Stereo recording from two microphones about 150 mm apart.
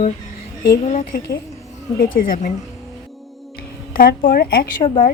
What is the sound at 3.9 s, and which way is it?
Speech, 75° left (ahead or behind).